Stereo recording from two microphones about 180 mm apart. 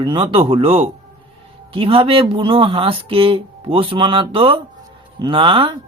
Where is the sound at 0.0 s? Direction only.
30° right (ahead or behind).